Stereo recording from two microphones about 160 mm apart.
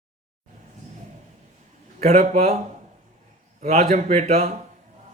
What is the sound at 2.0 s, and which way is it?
Speech, 45° right (ahead or behind).